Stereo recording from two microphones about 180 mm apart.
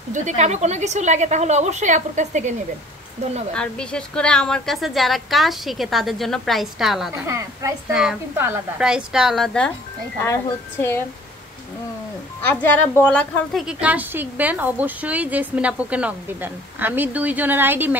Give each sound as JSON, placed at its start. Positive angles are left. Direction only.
{"t": 0.1, "sound": "a woman's voice", "side_deg": -45}
{"t": 3.5, "sound": "a woman's voice", "side_deg": 5}
{"t": 7.2, "sound": "a woman's voice", "side_deg": -15}
{"t": 7.9, "sound": "a woman's voice", "side_deg": -5}
{"t": 10.2, "sound": "speech", "side_deg": 15}
{"t": 12.6, "sound": "a woman's voice", "side_deg": 10}